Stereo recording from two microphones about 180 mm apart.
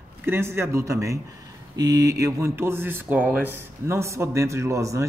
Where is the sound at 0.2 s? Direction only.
15° right (ahead or behind).